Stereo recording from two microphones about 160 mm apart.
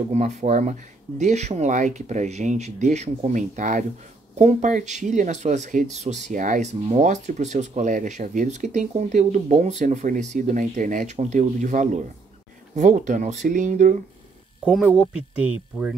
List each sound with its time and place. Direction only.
0.1 s speech: 45° right (ahead or behind)
14.6 s speech: 5° right (ahead or behind)